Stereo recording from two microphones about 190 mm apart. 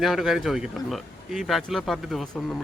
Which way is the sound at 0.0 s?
Centre (ahead or behind).